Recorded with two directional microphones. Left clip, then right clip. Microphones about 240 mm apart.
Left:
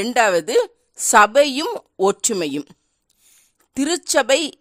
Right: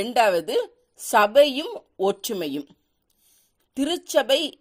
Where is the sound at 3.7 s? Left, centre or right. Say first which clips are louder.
Left 4 dB; left.